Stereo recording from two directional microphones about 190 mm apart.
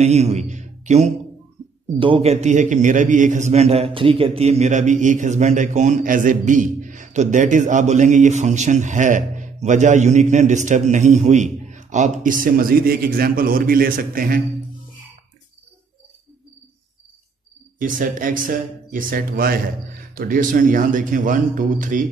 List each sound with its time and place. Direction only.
0.0 s a man's voice: 35° right (ahead or behind)
17.7 s speech: 45° right (ahead or behind)